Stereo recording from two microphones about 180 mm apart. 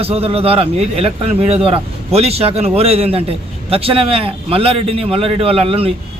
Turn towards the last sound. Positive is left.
turn(degrees=-30)  # may be behind; listen again after turning